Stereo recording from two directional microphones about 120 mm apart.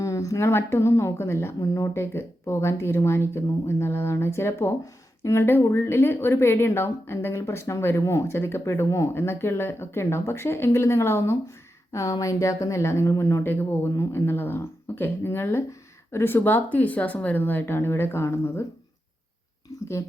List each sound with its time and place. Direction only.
0.0 s speech: 25° left (ahead or behind)